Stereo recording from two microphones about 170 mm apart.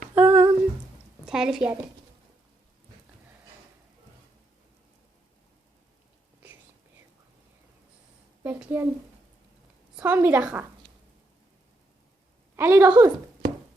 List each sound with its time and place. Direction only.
0.1 s a sound: 10° right (ahead or behind)
1.2 s a woman's voice: 5° right (ahead or behind)
8.4 s a woman's voice: 10° right (ahead or behind)
10.0 s a woman's voice: 10° right (ahead or behind)
12.5 s a woman's voice: 15° right (ahead or behind)
12.9 s a sound: 25° right (ahead or behind)